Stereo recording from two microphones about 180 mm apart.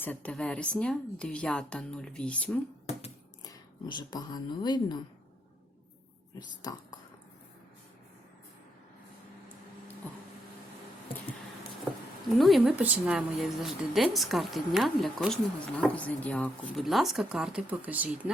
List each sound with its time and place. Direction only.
0.0 s a woman's voice: 10° left (ahead or behind)
3.4 s speech: 25° left (ahead or behind)
6.6 s speech: 20° left (ahead or behind)
12.4 s a woman's voice: centre (ahead or behind)